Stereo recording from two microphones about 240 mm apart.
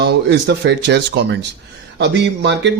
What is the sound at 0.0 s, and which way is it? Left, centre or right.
A man's voice, right.